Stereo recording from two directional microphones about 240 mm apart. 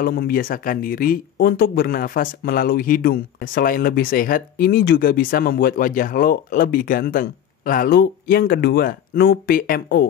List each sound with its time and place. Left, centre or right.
0.0 s speech: left